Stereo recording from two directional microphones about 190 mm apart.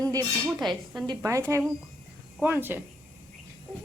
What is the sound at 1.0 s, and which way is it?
A woman's voice, 20° right (ahead or behind).